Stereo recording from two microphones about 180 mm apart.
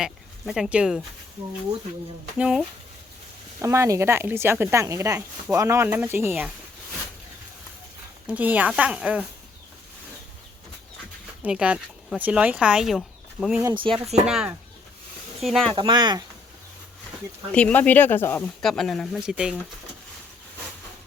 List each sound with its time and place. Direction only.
0.0 s speech: centre (ahead or behind)
2.4 s speech: 5° right (ahead or behind)
3.6 s speech: 15° right (ahead or behind)
8.3 s speech: 10° right (ahead or behind)
11.4 s speech: 5° right (ahead or behind)
13.9 s speech: 30° right (ahead or behind)
14.3 s speech: 5° right (ahead or behind)
15.7 s speech: 25° right (ahead or behind)
17.5 s speech: 5° left (ahead or behind)
18.6 s speech: centre (ahead or behind)